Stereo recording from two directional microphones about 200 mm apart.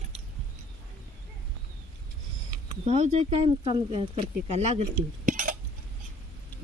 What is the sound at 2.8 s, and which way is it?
Speech, 35° right (ahead or behind).